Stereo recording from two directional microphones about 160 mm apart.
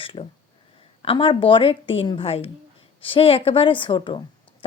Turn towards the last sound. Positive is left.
turn(degrees=30)  # may be behind; listen again after turning